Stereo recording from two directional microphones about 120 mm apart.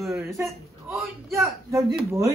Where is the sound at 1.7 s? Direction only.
25° right (ahead or behind).